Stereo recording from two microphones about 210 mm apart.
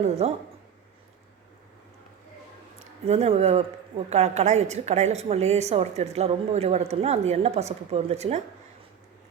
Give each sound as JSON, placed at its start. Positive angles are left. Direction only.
{"t": 0.0, "sound": "a woman's voice", "side_deg": -30}
{"t": 2.7, "sound": "a woman's voice", "side_deg": -30}